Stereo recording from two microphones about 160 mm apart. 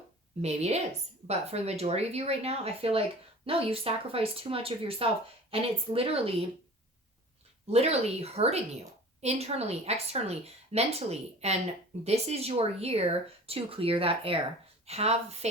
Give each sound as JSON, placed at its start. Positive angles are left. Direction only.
{"t": 0.4, "sound": "a woman's voice", "side_deg": -40}
{"t": 7.7, "sound": "speech", "side_deg": -40}